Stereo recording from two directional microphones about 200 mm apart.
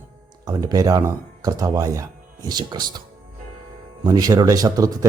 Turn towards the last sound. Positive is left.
turn(degrees=-15)  # may be behind; listen again after turning